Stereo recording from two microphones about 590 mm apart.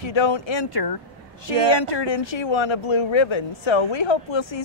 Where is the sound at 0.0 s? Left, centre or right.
Left.